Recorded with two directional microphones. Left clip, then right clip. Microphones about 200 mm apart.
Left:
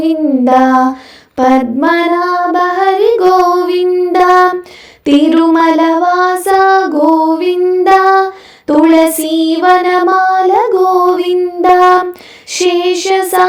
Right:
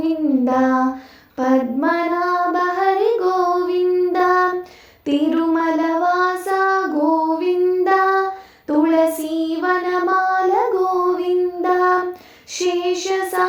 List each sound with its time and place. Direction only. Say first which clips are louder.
0.0 s child singing: left 8 dB; 40° left (ahead or behind)
12.5 s female singing: left 9 dB; 40° left (ahead or behind)